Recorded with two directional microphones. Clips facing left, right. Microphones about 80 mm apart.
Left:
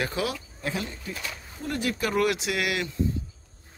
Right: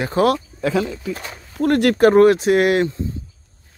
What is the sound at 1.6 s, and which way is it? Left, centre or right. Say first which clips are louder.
A man's voice: right 15 dB; right.